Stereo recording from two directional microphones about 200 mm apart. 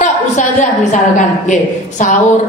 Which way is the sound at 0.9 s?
35° left (ahead or behind).